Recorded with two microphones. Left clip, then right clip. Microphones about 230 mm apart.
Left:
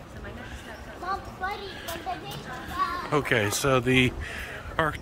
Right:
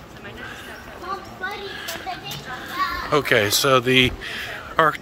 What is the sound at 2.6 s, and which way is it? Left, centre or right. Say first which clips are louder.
Speech: right 4 dB; centre.